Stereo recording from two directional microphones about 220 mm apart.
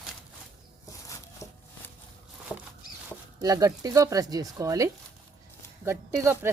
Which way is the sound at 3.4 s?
15° right (ahead or behind).